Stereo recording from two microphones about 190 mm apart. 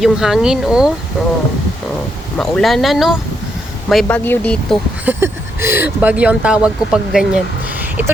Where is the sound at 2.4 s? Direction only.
Centre (ahead or behind).